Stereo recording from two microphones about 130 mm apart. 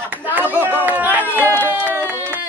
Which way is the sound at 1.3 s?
15° right (ahead or behind).